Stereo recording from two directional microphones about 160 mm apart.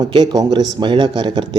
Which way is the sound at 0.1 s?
25° right (ahead or behind).